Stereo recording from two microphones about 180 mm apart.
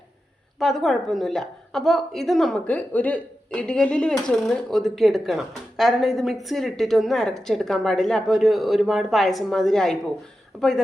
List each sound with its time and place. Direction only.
0.6 s a woman's voice: centre (ahead or behind)